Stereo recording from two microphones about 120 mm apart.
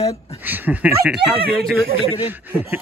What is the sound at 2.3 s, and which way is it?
Speech, 15° right (ahead or behind).